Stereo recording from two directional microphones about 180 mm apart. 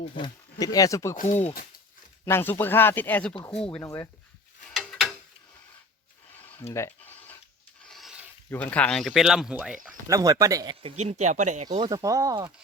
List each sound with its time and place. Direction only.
0.2 s speech: 25° left (ahead or behind)
1.1 s speech: 45° left (ahead or behind)
2.2 s speech: 10° left (ahead or behind)
3.8 s speech: 15° left (ahead or behind)
4.7 s gears: centre (ahead or behind)
6.7 s a sound: 15° left (ahead or behind)
7.9 s a sound: centre (ahead or behind)
8.4 s speech: 10° left (ahead or behind)
9.8 s speech: 20° right (ahead or behind)
11.0 s speech: 40° right (ahead or behind)
11.8 s speech: 20° right (ahead or behind)